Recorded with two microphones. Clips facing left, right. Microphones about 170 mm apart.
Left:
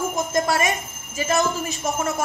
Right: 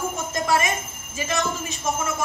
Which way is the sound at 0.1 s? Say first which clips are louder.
Left 2 dB; 40° left (ahead or behind).